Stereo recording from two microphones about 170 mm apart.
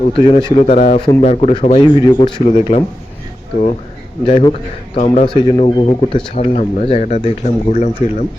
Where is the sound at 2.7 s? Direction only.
45° left (ahead or behind).